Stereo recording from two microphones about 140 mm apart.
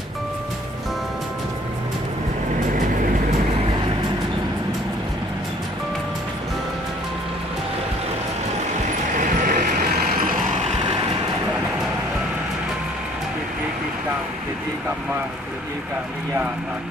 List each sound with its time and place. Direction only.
9.1 s vehicle: 65° right (ahead or behind); by 10.3 s 90° right